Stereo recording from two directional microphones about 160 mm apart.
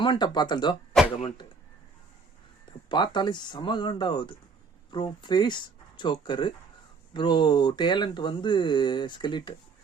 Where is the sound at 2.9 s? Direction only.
30° left (ahead or behind).